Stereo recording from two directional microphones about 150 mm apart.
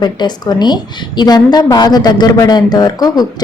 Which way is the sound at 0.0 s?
30° left (ahead or behind).